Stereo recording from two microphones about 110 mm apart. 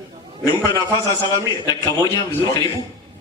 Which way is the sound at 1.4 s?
35° left (ahead or behind).